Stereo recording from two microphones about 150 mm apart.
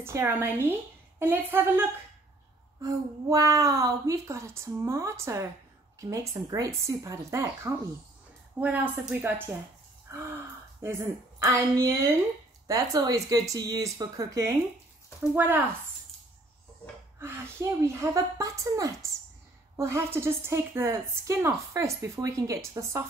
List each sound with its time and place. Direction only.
0.0 s a woman's voice: 15° right (ahead or behind)
10.1 s gasp: 20° right (ahead or behind)
10.8 s a woman's voice: 20° right (ahead or behind)
17.2 s a woman's voice: 20° right (ahead or behind)